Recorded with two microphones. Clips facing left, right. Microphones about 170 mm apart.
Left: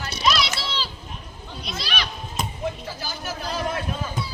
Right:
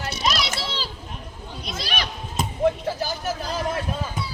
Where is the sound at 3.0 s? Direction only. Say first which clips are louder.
Right 5 dB; 45° right (ahead or behind).